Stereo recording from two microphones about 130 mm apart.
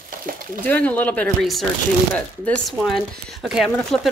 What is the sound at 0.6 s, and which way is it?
Speech, 15° left (ahead or behind).